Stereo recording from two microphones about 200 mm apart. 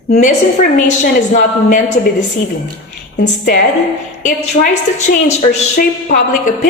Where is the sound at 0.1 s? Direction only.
40° left (ahead or behind).